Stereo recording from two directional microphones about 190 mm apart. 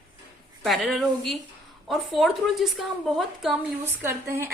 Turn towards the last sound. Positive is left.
turn(degrees=-10)  # may be behind; listen again after turning